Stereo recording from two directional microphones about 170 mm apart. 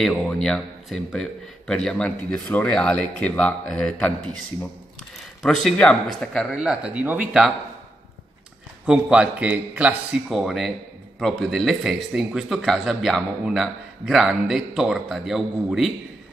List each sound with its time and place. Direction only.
0.0 s speech: 5° left (ahead or behind)
8.8 s speech: 5° right (ahead or behind)